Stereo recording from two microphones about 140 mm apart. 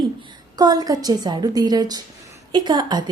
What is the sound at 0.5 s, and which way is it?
A woman's voice, 30° right (ahead or behind).